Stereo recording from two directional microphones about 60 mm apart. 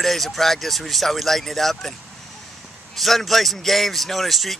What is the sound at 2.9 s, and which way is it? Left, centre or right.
Speech, centre.